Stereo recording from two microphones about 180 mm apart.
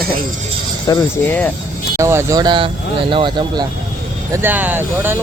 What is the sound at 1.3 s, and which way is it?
Speech, 10° left (ahead or behind).